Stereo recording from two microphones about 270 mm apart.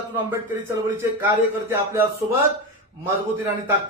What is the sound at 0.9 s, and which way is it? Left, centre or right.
Speech, centre.